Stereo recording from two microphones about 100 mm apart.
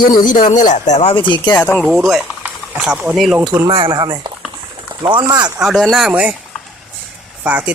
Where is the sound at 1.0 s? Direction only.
60° left (ahead or behind).